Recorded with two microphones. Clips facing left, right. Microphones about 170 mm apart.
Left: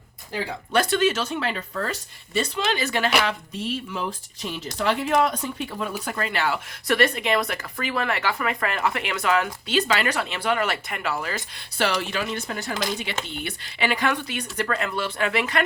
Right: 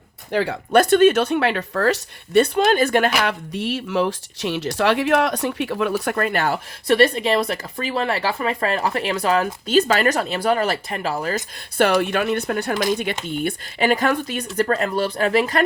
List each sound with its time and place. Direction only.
0.3 s speech: 70° right (ahead or behind)
0.8 s speech: 50° right (ahead or behind); by 2.5 s 70° right (ahead or behind)
2.6 s speech: 50° right (ahead or behind)
6.8 s speech: 30° right (ahead or behind)